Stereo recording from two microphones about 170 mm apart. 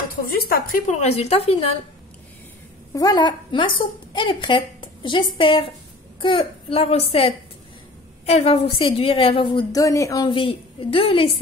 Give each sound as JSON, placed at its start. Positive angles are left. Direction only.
{"t": 0.2, "sound": "a woman's voice", "side_deg": 60}
{"t": 2.9, "sound": "a woman's voice", "side_deg": 20}